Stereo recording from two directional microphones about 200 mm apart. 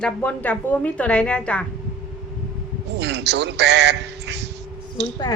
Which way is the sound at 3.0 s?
60° right (ahead or behind).